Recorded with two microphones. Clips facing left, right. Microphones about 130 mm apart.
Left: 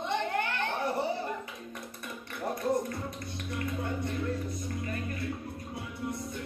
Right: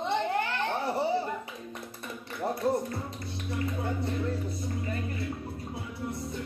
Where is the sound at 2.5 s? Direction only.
30° right (ahead or behind).